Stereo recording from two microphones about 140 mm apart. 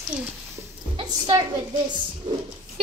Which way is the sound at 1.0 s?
40° right (ahead or behind).